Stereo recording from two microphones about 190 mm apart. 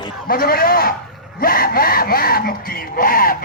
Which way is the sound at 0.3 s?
50° left (ahead or behind).